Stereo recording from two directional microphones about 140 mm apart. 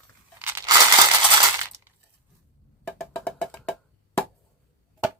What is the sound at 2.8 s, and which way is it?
Music, 10° left (ahead or behind).